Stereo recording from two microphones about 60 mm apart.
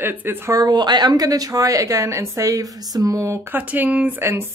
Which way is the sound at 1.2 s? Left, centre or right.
Right.